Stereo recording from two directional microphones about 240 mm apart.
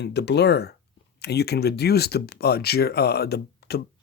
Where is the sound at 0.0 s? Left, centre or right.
Left.